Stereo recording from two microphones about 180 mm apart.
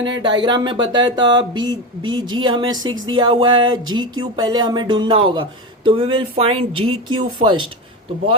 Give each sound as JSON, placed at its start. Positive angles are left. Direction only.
{"t": 0.0, "sound": "speech", "side_deg": -25}